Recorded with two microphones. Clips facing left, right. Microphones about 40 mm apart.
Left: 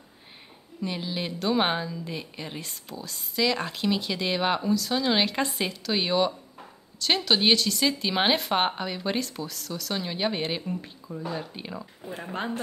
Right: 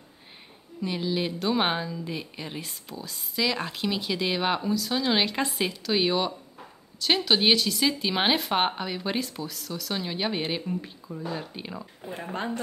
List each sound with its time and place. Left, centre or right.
0.8 s speech: centre